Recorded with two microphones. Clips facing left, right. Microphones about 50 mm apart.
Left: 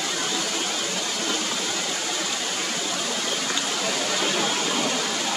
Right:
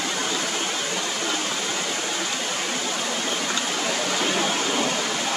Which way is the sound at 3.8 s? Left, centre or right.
Centre.